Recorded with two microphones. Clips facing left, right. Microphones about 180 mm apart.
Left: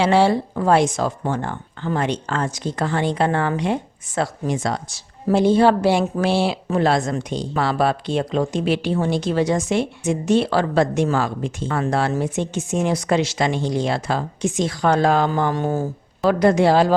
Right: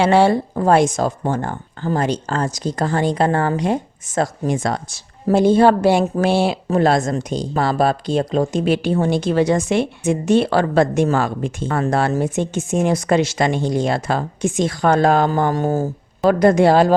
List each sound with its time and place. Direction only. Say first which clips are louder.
0.0 s speech: right 2 dB; 50° right (ahead or behind)